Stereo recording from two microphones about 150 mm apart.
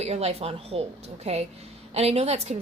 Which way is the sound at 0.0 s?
45° right (ahead or behind).